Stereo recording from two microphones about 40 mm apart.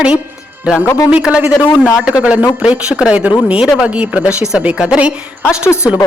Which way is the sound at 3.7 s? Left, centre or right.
Right.